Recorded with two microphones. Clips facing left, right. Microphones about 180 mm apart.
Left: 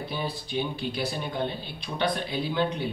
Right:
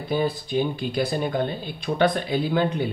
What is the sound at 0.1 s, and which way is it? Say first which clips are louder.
Speech: right 11 dB; 45° right (ahead or behind).